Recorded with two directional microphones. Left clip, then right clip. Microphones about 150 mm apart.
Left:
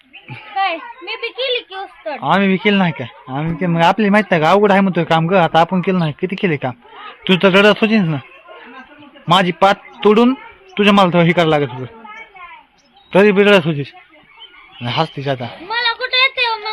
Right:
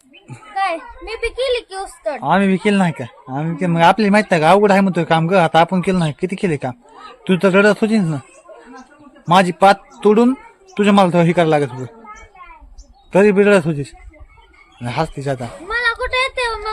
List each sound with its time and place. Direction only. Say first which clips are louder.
0.7 s a woman's voice: left 1 dB; 20° right (ahead or behind)
2.2 s a man's voice: left 2 dB; 5° right (ahead or behind)
9.2 s a man's voice: right 1 dB; 5° right (ahead or behind)
13.1 s a man's voice: left 1 dB; 5° right (ahead or behind)
15.6 s a sound: even; 20° right (ahead or behind)